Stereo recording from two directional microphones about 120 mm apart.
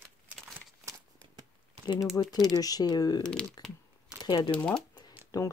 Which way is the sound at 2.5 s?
30° left (ahead or behind).